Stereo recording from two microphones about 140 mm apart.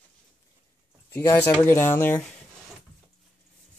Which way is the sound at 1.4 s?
15° left (ahead or behind).